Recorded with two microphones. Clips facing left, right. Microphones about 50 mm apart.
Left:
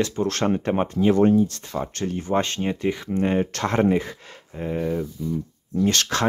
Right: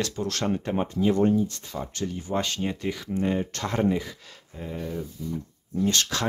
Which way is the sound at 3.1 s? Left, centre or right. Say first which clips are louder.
Left 3 dB; left.